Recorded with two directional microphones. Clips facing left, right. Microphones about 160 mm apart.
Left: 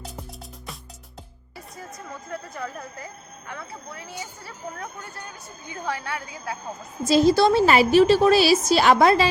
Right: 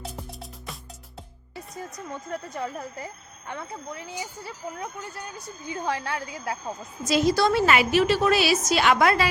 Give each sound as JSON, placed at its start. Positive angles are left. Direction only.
{"t": 5.8, "sound": "a woman's voice", "side_deg": -25}
{"t": 7.1, "sound": "a woman's voice", "side_deg": 30}